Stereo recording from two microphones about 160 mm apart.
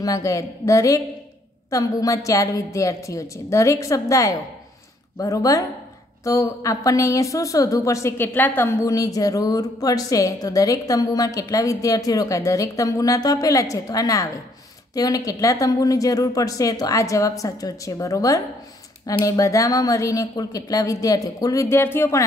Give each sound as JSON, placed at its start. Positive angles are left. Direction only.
{"t": 0.0, "sound": "a woman's voice", "side_deg": 20}